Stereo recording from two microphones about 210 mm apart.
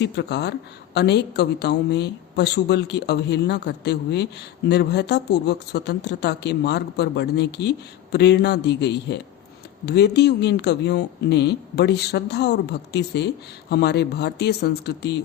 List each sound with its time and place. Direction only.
0.0 s a woman's voice: 55° left (ahead or behind)